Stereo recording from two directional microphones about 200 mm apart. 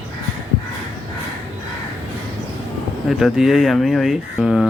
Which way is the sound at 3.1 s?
Centre (ahead or behind).